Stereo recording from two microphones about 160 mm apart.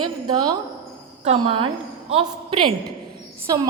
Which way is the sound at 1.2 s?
40° right (ahead or behind).